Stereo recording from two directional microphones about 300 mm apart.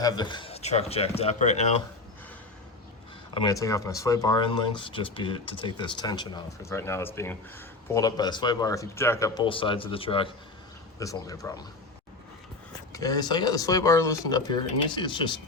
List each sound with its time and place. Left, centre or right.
0.0 s speech: centre
3.3 s speech: centre
12.9 s speech: centre